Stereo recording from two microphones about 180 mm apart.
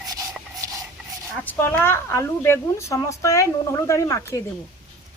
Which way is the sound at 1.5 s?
10° left (ahead or behind).